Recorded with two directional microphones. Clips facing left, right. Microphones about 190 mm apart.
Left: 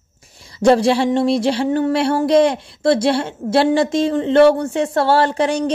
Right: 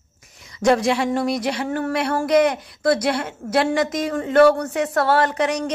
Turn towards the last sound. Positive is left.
turn(degrees=30)  # may be behind; listen again after turning